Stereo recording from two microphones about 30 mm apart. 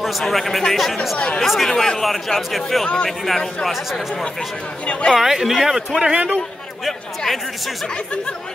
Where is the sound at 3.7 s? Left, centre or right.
Centre.